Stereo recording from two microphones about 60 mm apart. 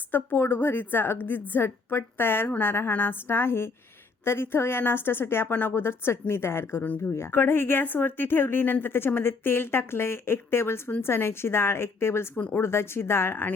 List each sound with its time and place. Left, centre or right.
0.1 s a woman's voice: left